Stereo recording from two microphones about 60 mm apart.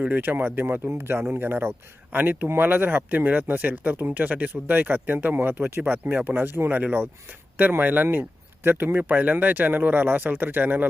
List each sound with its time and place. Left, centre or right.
0.0 s speech: right